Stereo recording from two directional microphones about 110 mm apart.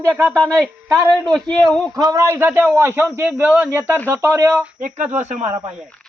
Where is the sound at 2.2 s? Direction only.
20° right (ahead or behind).